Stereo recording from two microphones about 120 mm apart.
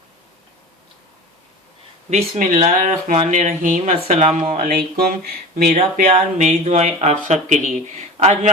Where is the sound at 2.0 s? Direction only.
65° right (ahead or behind).